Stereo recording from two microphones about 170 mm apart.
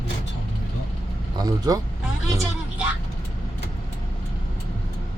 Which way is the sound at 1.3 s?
25° right (ahead or behind).